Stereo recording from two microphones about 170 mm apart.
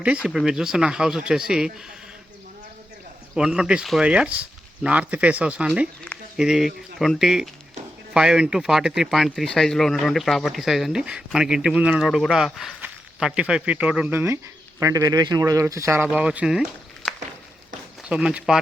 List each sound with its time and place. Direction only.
0.0 s speech: 5° right (ahead or behind)
3.3 s speech: 5° right (ahead or behind)
18.1 s speech: 5° right (ahead or behind)